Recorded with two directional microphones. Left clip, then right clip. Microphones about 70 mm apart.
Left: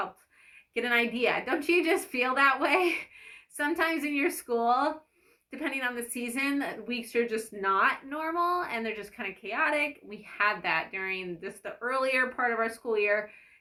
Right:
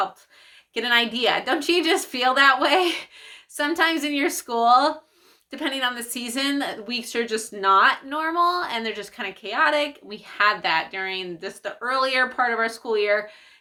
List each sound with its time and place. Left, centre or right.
0.7 s speech: right